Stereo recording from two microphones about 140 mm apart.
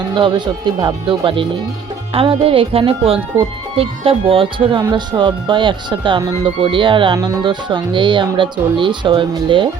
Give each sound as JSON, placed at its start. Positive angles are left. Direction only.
{"t": 0.1, "sound": "speech", "side_deg": -35}